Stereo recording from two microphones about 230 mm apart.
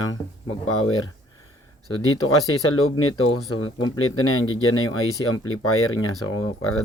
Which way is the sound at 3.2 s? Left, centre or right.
Left.